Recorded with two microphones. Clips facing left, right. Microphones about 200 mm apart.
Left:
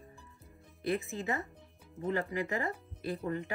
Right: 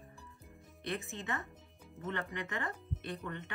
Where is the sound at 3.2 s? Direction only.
35° left (ahead or behind).